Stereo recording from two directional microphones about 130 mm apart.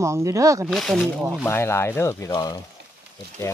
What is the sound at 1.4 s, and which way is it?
Speech, 20° left (ahead or behind).